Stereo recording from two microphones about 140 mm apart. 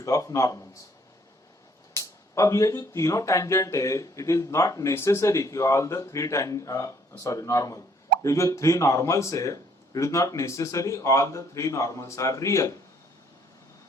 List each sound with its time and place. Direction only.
0.0 s speech: 25° left (ahead or behind)
1.9 s speech: 20° left (ahead or behind)